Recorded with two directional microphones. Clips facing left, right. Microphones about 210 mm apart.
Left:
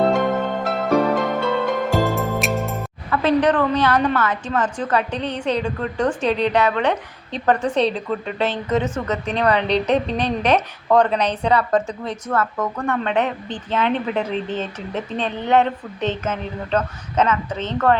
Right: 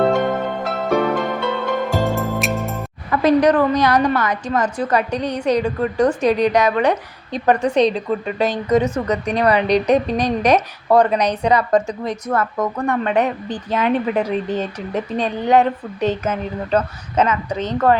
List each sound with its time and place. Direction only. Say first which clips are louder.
0.0 s music: right 1 dB; centre (ahead or behind)
3.1 s a woman's voice: right 3 dB; 10° right (ahead or behind)